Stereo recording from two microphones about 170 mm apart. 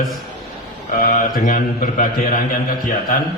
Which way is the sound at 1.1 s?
50° left (ahead or behind).